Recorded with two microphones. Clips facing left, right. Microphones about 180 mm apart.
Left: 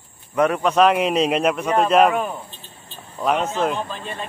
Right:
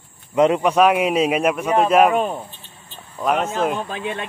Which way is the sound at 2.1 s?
20° right (ahead or behind).